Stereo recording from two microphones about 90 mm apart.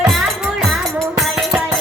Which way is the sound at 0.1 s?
Centre (ahead or behind).